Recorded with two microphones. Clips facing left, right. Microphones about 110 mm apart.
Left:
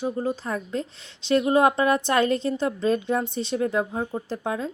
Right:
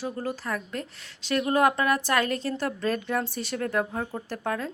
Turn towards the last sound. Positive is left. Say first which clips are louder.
# left 2 dB
turn(degrees=15)  # may be behind; listen again after turning